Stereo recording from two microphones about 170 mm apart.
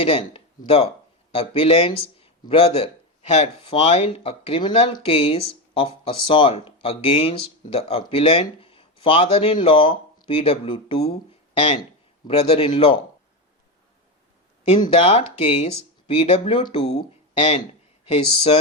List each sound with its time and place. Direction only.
0.0 s speech: 35° left (ahead or behind)
12.3 s speech: 35° left (ahead or behind)
14.8 s speech: 35° left (ahead or behind)
18.0 s speech: 35° left (ahead or behind)